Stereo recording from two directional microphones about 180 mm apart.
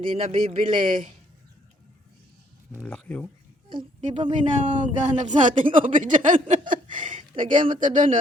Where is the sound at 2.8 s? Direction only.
10° left (ahead or behind).